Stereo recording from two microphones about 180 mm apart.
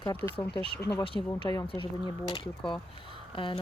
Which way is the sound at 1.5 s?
30° left (ahead or behind).